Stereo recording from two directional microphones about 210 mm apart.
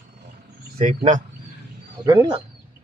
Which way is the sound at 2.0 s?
20° right (ahead or behind).